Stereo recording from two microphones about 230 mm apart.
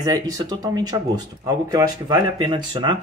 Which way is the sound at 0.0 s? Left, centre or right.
Centre.